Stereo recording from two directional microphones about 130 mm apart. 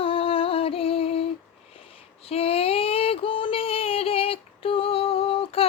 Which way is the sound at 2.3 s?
50° left (ahead or behind).